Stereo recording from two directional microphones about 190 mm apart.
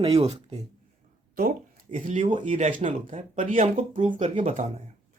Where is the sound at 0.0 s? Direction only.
30° right (ahead or behind).